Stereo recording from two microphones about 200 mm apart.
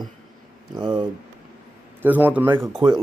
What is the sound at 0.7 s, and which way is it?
Speech, 20° right (ahead or behind).